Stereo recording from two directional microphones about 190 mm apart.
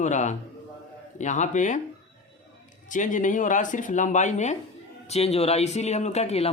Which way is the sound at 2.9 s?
45° left (ahead or behind).